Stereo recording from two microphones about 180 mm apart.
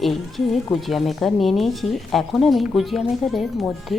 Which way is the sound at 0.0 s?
Centre (ahead or behind).